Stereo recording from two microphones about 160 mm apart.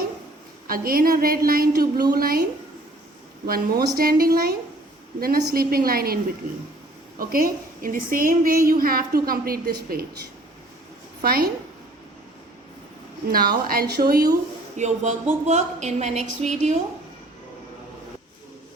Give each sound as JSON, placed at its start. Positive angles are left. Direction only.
{"t": 0.7, "sound": "a woman's voice", "side_deg": -65}
{"t": 7.2, "sound": "a woman's voice", "side_deg": -65}
{"t": 11.2, "sound": "a woman's voice", "side_deg": -70}
{"t": 13.3, "sound": "a woman's voice", "side_deg": -70}
{"t": 14.8, "sound": "a woman's voice", "side_deg": -45}